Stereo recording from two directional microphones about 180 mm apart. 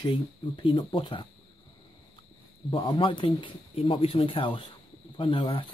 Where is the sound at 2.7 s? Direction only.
25° left (ahead or behind).